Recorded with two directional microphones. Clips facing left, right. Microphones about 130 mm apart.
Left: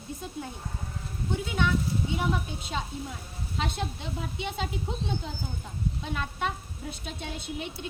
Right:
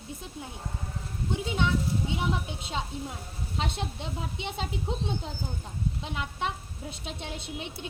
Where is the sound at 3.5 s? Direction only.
30° right (ahead or behind).